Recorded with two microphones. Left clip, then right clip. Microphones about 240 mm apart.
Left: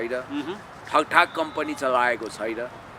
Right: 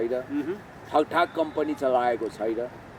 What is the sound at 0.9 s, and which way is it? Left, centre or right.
Speech, left.